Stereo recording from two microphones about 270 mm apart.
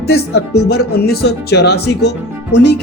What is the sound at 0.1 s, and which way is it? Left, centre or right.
Speech, left.